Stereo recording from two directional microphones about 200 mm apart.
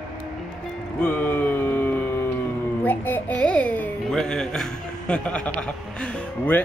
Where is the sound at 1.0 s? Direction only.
10° left (ahead or behind).